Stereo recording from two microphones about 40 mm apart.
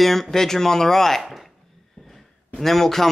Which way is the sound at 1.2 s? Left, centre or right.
Centre.